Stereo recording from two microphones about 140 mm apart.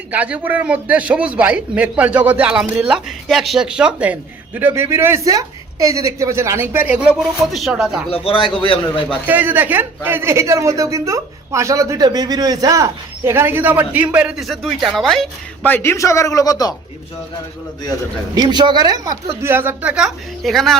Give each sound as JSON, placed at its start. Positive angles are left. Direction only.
{"t": 0.1, "sound": "a man's voice", "side_deg": -10}
{"t": 8.1, "sound": "a man's voice", "side_deg": 40}
{"t": 9.2, "sound": "a man's voice", "side_deg": -10}
{"t": 18.3, "sound": "speech", "side_deg": -35}
{"t": 19.0, "sound": "a man's voice", "side_deg": -20}